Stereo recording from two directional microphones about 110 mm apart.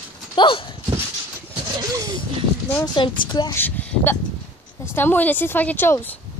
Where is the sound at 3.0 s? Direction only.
40° left (ahead or behind).